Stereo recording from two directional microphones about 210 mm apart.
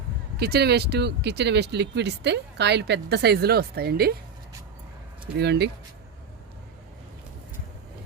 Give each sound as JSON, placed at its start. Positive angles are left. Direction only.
{"t": 0.3, "sound": "speech", "side_deg": -50}
{"t": 5.4, "sound": "speech", "side_deg": -50}